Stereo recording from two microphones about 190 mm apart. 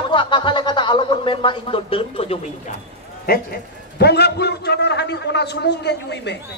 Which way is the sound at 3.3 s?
50° left (ahead or behind).